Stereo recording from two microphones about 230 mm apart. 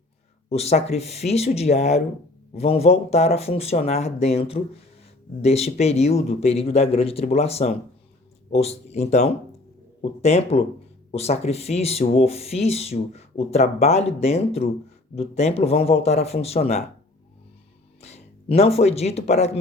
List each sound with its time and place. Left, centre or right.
0.5 s speech: left
18.0 s speech: left